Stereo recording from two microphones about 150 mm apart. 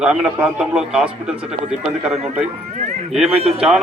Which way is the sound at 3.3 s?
40° right (ahead or behind).